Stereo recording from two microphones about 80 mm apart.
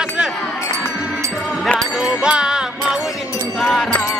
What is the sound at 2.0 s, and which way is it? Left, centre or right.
Music, centre.